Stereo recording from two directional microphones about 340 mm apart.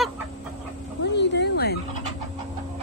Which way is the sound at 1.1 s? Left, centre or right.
Left.